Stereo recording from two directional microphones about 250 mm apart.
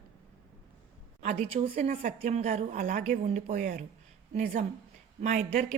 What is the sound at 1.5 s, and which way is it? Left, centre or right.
A woman's voice, right.